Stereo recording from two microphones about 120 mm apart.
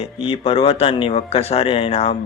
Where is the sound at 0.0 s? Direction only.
50° left (ahead or behind).